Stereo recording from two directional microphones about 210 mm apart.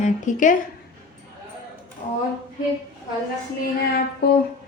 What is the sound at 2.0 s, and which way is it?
Speech, 35° left (ahead or behind).